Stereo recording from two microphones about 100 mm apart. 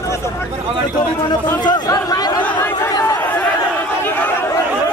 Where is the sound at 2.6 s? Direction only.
30° left (ahead or behind).